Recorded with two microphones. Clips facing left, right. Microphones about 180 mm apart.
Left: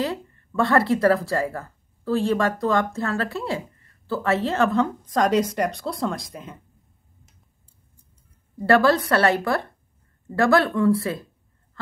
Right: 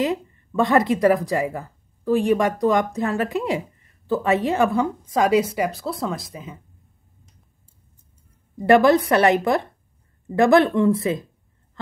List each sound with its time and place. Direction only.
0.0 s speech: 20° right (ahead or behind); by 6.6 s centre (ahead or behind)
8.5 s speech: 15° right (ahead or behind)